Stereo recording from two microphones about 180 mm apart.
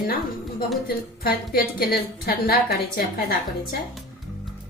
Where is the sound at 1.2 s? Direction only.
55° left (ahead or behind).